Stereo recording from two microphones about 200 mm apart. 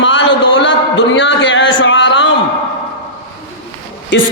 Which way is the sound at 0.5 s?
65° left (ahead or behind).